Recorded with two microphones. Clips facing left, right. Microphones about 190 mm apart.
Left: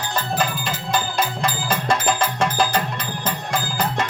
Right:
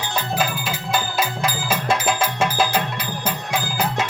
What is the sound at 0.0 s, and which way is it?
Music, centre (ahead or behind).